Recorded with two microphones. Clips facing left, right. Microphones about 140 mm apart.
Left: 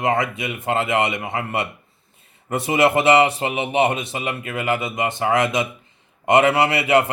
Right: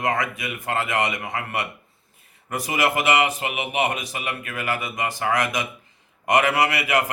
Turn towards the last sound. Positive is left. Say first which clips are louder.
# left 4 dB
turn(degrees=30)  # may be behind; listen again after turning